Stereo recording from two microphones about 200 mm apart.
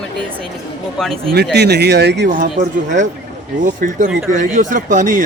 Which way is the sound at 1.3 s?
55° right (ahead or behind).